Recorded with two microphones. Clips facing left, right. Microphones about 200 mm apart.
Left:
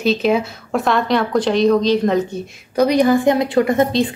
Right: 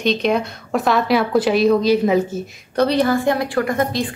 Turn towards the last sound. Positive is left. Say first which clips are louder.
# left 4 dB
turn(degrees=25)  # may be behind; listen again after turning